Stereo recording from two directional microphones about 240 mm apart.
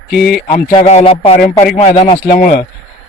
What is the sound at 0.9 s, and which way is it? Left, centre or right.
Speech, left.